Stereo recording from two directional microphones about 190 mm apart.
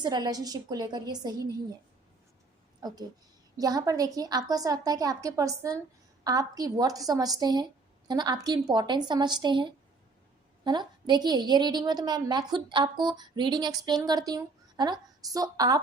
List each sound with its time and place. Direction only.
0.0 s a woman's voice: 20° right (ahead or behind)
3.6 s a woman's voice: 20° right (ahead or behind)